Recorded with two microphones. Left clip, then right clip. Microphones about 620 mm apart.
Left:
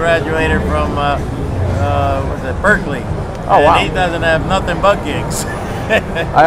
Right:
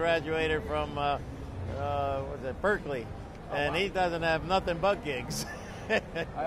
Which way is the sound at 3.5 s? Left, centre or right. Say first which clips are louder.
Left 19 dB; right.